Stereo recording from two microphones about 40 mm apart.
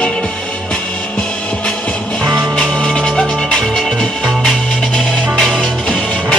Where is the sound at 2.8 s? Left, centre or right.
Left.